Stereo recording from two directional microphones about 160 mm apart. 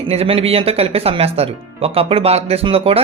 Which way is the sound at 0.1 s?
40° right (ahead or behind).